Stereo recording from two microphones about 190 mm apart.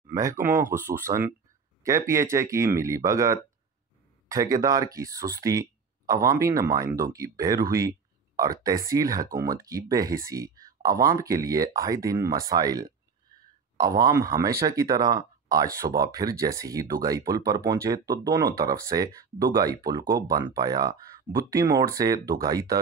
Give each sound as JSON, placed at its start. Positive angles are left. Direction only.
{"t": 0.0, "sound": "speech", "side_deg": -15}